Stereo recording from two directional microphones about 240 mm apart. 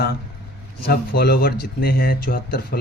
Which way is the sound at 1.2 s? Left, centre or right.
Left.